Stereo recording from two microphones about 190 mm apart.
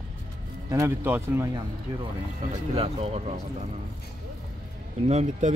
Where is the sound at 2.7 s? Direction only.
30° right (ahead or behind).